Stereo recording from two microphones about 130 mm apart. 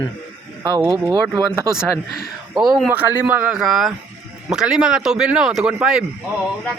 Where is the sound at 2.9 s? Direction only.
10° right (ahead or behind).